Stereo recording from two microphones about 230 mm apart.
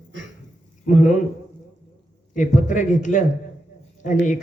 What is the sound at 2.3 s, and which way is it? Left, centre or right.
Speech, left.